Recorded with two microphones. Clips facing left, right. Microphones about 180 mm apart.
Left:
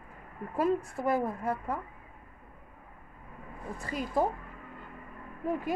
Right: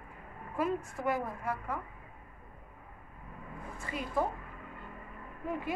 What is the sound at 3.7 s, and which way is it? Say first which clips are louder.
Speech: left 3 dB; 40° left (ahead or behind).